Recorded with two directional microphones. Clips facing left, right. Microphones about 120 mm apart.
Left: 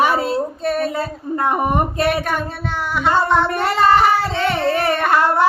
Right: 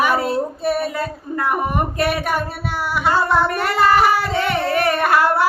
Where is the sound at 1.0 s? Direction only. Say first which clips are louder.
Left 2 dB; 25° left (ahead or behind).